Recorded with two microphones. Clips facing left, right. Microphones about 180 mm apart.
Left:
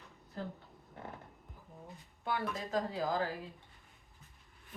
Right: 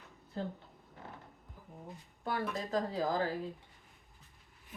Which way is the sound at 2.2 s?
40° right (ahead or behind).